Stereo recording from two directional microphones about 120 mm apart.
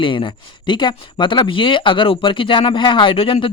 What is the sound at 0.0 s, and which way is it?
Speech, 45° left (ahead or behind).